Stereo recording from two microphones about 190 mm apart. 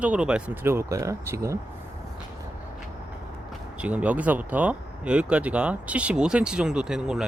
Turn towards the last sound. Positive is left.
turn(degrees=-5)  # may be behind; listen again after turning